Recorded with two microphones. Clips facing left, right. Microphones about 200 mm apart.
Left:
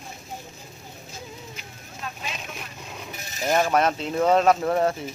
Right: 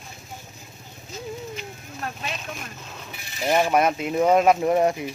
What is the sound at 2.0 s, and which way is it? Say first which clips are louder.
Vehicle: right 3 dB; 60° right (ahead or behind).